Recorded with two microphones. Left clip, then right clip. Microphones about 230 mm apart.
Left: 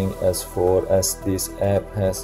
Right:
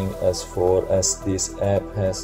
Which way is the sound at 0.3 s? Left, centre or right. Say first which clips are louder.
Even; centre.